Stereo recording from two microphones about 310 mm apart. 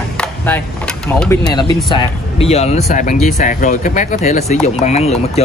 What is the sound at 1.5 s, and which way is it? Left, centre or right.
Speech, centre.